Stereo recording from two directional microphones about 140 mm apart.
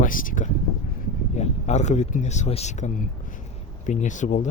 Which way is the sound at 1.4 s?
55° left (ahead or behind).